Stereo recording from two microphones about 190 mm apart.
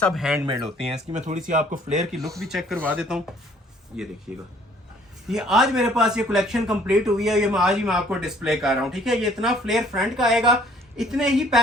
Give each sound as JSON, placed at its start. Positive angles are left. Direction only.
{"t": 0.0, "sound": "speech", "side_deg": 0}
{"t": 0.4, "sound": "speech", "side_deg": -25}
{"t": 1.1, "sound": "speech", "side_deg": -40}
{"t": 2.4, "sound": "speech", "side_deg": 0}
{"t": 5.3, "sound": "speech", "side_deg": 0}